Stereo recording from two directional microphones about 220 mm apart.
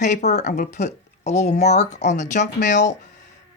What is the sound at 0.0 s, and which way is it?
Speech, 30° left (ahead or behind).